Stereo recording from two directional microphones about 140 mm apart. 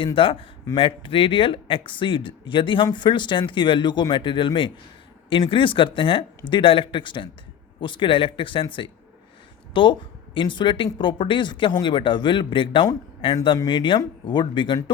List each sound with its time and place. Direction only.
0.0 s speech: 40° left (ahead or behind)
9.7 s speech: 35° left (ahead or behind)